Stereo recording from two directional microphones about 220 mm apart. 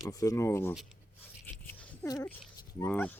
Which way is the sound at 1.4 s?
10° left (ahead or behind).